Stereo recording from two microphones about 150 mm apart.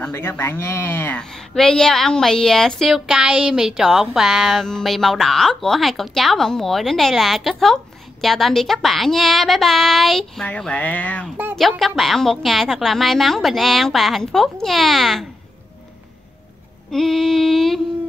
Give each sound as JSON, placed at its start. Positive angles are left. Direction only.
{"t": 0.0, "sound": "speech", "side_deg": 15}
{"t": 1.2, "sound": "a woman's voice", "side_deg": 5}
{"t": 16.9, "sound": "a woman's voice", "side_deg": 0}